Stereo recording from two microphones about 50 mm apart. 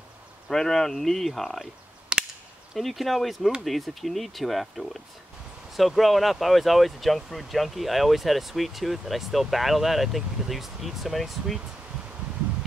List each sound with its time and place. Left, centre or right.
0.5 s speech: centre
2.1 s cap gun: centre
2.7 s speech: centre